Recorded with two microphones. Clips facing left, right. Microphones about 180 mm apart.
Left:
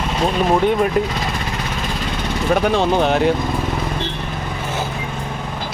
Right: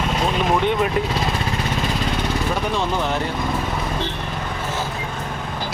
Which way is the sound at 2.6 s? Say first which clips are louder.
Left 6 dB; 70° left (ahead or behind).